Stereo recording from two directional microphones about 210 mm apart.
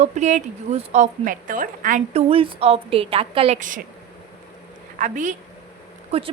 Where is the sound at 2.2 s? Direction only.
25° right (ahead or behind).